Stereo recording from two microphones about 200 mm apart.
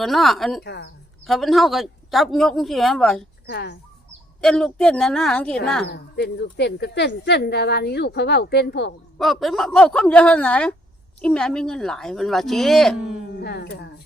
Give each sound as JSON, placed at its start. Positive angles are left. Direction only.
{"t": 0.0, "sound": "a man's voice", "side_deg": 0}
{"t": 0.6, "sound": "speech", "side_deg": 55}
{"t": 1.2, "sound": "a man's voice", "side_deg": 0}
{"t": 3.4, "sound": "speech", "side_deg": 55}
{"t": 4.4, "sound": "a man's voice", "side_deg": 5}
{"t": 5.9, "sound": "speech", "side_deg": 55}
{"t": 9.1, "sound": "a man's voice", "side_deg": 0}
{"t": 13.3, "sound": "speech", "side_deg": 55}